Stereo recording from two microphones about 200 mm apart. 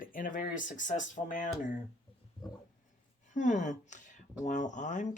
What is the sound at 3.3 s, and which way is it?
A woman's voice, 35° left (ahead or behind).